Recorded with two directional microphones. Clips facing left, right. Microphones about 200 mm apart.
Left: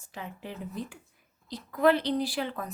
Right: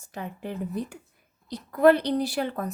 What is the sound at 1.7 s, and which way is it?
Speech, 50° right (ahead or behind).